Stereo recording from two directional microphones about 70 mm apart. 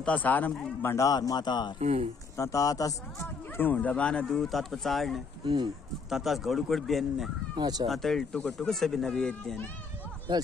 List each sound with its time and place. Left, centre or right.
0.0 s speech: left
0.9 s speech: left
2.3 s speech: left
3.5 s speech: left
4.3 s speech: centre
7.5 s speech: right
7.9 s speech: centre
10.3 s speech: right